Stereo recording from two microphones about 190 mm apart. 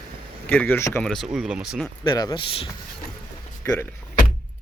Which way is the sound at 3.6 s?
15° left (ahead or behind).